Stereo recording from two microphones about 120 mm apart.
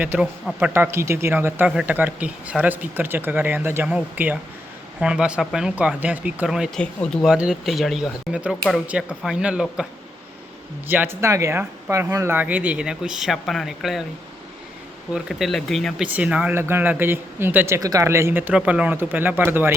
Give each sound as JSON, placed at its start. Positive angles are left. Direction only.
{"t": 0.0, "sound": "speech", "side_deg": -10}
{"t": 6.7, "sound": "speech", "side_deg": 5}
{"t": 7.3, "sound": "speech", "side_deg": -5}
{"t": 10.8, "sound": "speech", "side_deg": -15}
{"t": 15.1, "sound": "speech", "side_deg": 0}
{"t": 16.0, "sound": "speech", "side_deg": -10}
{"t": 17.7, "sound": "speech", "side_deg": -30}